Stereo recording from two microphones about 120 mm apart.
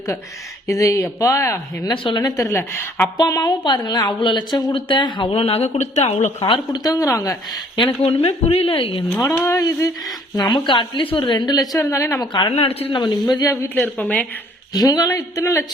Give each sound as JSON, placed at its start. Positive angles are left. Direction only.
{"t": 0.7, "sound": "a woman's voice", "side_deg": 25}
{"t": 1.9, "sound": "a woman's voice", "side_deg": 40}
{"t": 3.2, "sound": "a woman's voice", "side_deg": 30}
{"t": 6.8, "sound": "a woman's voice", "side_deg": 30}
{"t": 7.8, "sound": "a woman's voice", "side_deg": 45}
{"t": 9.2, "sound": "speech", "side_deg": 25}
{"t": 13.7, "sound": "a woman's voice", "side_deg": 10}
{"t": 14.7, "sound": "speech", "side_deg": 30}